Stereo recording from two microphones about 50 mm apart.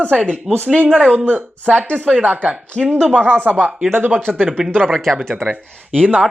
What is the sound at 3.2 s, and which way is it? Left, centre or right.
Speech, right.